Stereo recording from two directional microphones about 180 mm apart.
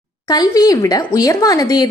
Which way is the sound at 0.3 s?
20° left (ahead or behind).